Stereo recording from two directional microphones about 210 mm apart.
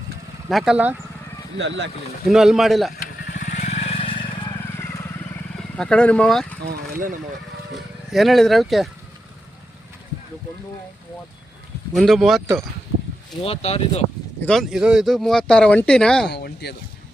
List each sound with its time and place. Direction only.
0.4 s speech: 5° right (ahead or behind)
1.5 s speech: 60° right (ahead or behind)
2.2 s speech: centre (ahead or behind)
2.9 s vehicle: 45° left (ahead or behind); by 4.5 s 25° left (ahead or behind)
5.7 s speech: 5° left (ahead or behind)
6.7 s speech: 40° right (ahead or behind)
8.1 s speech: centre (ahead or behind)
11.9 s speech: centre (ahead or behind)
13.4 s speech: 30° left (ahead or behind)
14.4 s speech: centre (ahead or behind)
16.3 s speech: 50° left (ahead or behind)